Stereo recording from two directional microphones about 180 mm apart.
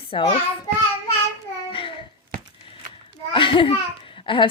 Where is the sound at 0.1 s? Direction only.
30° left (ahead or behind).